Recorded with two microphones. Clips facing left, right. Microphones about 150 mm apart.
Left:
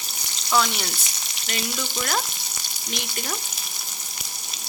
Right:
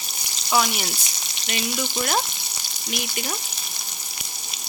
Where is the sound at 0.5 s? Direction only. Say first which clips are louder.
Even; 10° right (ahead or behind).